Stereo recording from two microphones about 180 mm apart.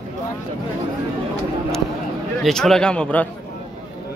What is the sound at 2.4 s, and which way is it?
Speech, centre (ahead or behind).